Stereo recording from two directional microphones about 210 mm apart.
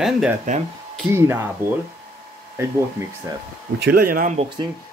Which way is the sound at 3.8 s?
45° right (ahead or behind).